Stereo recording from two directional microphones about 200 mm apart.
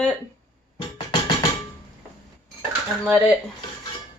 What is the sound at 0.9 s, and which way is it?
Music, 20° left (ahead or behind).